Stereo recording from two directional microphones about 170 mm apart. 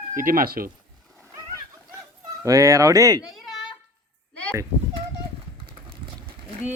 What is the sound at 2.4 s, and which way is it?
Speech, 20° right (ahead or behind).